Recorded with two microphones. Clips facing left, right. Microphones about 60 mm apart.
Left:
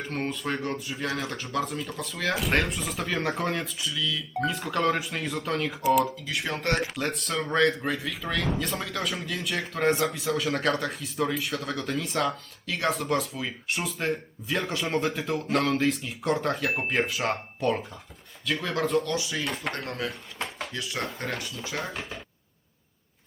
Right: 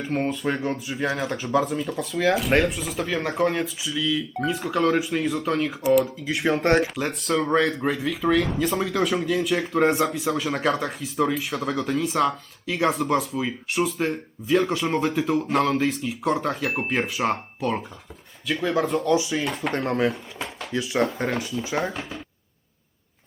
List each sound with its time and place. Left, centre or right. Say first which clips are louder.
0.0 s speech: right 6 dB; centre
19.7 s speech: right 9 dB; right
20.1 s speech: right 7 dB; centre
20.7 s speech: right 11 dB; centre